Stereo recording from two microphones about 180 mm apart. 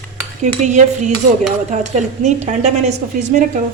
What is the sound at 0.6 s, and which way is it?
Dishes, 40° right (ahead or behind).